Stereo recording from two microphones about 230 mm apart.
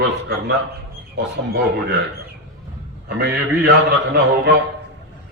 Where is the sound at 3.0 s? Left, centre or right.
Right.